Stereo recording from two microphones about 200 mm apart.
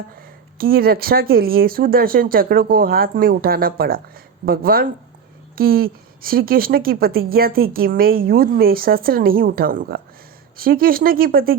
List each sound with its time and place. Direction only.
0.2 s a woman's voice: 50° right (ahead or behind)